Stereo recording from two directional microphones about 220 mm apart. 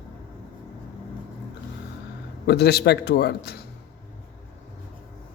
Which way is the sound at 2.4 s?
45° left (ahead or behind).